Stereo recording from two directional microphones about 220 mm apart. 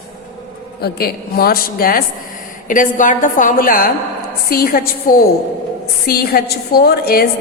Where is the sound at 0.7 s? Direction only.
45° left (ahead or behind).